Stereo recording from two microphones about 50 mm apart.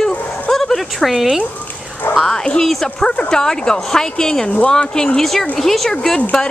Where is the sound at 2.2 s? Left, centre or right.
Centre.